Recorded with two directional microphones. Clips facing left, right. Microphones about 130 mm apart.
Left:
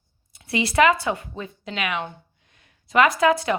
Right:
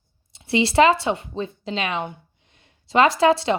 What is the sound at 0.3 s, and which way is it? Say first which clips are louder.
A woman's voice: right 3 dB; 25° right (ahead or behind).